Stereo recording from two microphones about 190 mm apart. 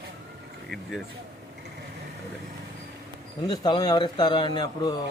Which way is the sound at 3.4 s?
20° left (ahead or behind).